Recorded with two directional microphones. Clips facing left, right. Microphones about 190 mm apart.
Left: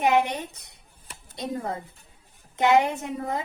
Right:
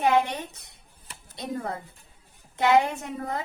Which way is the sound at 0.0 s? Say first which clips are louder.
Left 1 dB; 15° left (ahead or behind).